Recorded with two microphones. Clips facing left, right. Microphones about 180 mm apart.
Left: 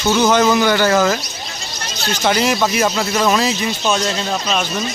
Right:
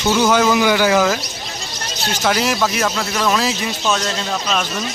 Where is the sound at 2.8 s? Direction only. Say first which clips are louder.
Left 3 dB; 10° left (ahead or behind).